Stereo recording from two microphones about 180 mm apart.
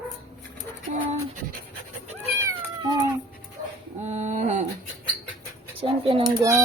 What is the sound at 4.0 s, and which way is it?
Speech, 40° right (ahead or behind).